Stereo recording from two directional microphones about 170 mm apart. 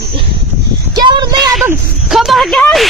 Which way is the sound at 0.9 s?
25° right (ahead or behind).